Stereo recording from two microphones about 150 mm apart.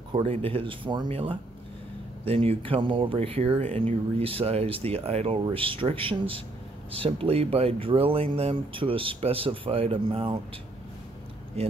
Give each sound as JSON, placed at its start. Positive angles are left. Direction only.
{"t": 0.1, "sound": "speech", "side_deg": -35}
{"t": 11.6, "sound": "speech", "side_deg": -45}